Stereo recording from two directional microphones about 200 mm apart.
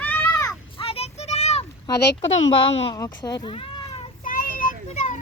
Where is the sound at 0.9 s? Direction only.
30° left (ahead or behind).